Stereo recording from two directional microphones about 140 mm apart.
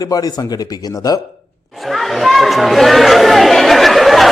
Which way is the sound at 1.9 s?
Centre (ahead or behind).